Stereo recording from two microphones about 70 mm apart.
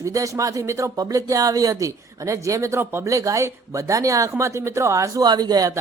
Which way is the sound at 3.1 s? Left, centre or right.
Right.